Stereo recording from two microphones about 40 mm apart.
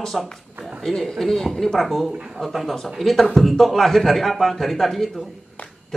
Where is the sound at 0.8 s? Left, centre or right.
Centre.